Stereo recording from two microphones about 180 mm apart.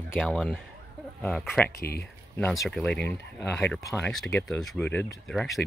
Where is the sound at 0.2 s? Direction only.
Centre (ahead or behind).